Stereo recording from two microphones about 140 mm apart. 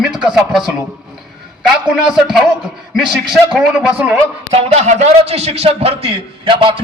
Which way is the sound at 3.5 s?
5° right (ahead or behind).